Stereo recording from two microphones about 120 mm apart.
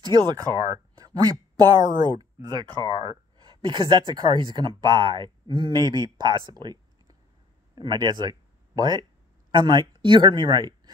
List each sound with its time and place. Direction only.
0.0 s speech: 35° right (ahead or behind)